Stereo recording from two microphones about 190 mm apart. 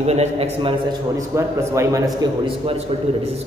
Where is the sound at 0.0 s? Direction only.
35° right (ahead or behind); by 2.0 s 15° right (ahead or behind).